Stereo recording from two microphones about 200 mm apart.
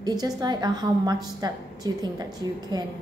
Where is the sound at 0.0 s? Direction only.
20° right (ahead or behind).